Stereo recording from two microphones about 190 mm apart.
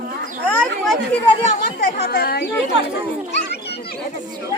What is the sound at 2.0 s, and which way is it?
Speech, 55° left (ahead or behind).